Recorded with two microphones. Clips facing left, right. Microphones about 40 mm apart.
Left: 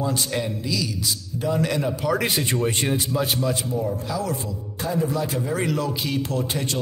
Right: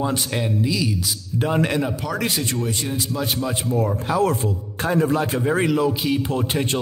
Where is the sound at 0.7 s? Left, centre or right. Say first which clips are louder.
Right 4 dB; right.